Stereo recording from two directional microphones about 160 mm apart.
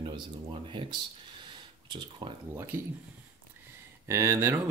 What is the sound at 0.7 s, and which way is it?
Speech, 30° right (ahead or behind).